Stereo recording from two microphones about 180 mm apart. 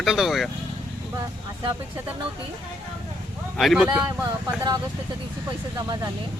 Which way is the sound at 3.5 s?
Centre (ahead or behind).